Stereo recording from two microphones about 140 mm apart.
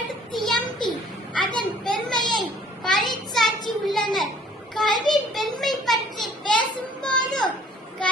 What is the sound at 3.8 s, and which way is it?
Children playing, centre (ahead or behind).